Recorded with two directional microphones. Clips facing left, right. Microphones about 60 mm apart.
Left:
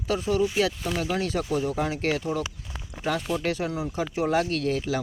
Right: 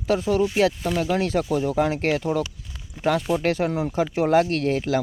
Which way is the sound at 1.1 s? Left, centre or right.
Right.